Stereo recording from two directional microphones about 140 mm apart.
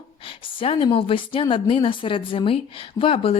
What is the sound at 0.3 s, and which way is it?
A woman's voice, 40° left (ahead or behind).